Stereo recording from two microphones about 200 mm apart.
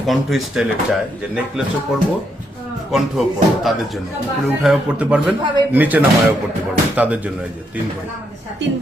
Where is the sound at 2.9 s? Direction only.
Centre (ahead or behind).